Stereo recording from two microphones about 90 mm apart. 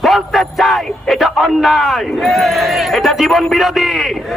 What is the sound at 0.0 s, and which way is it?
A man's voice, centre (ahead or behind).